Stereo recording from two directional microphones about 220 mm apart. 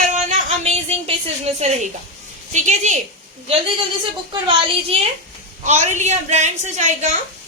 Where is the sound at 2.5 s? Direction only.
35° right (ahead or behind).